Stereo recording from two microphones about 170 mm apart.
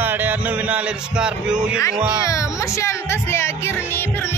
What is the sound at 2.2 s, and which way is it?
Speech, 20° left (ahead or behind).